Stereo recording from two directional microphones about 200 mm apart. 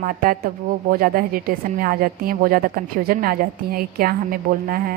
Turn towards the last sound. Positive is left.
turn(degrees=-45)  # may be behind; listen again after turning